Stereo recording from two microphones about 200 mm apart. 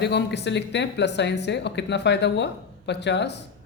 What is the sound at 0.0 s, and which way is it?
Speech, 55° left (ahead or behind).